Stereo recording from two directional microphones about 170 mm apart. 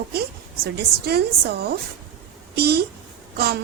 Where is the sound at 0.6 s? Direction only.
70° right (ahead or behind).